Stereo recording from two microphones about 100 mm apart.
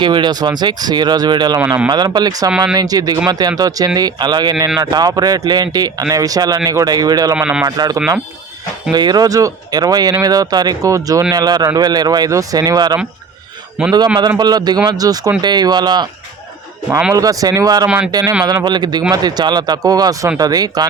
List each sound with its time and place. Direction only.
0.0 s speech: 50° right (ahead or behind)
1.5 s speech: 25° right (ahead or behind)
1.9 s speech: 45° right (ahead or behind)
7.3 s speech: 10° right (ahead or behind)
7.8 s speech: 35° right (ahead or behind)
8.9 s speech: 45° right (ahead or behind)
13.8 s speech: 10° right (ahead or behind)
14.2 s speech: 45° right (ahead or behind)
17.2 s speech: 35° right (ahead or behind)
17.8 s speech: 10° right (ahead or behind)
18.1 s speech: 40° right (ahead or behind)